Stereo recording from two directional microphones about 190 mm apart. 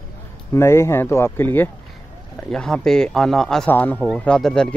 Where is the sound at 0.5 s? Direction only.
15° left (ahead or behind).